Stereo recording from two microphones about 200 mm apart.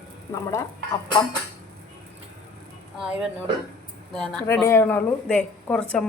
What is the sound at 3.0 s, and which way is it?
A woman's voice, 5° right (ahead or behind).